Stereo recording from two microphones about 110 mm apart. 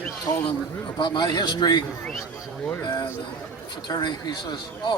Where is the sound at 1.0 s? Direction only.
45° left (ahead or behind).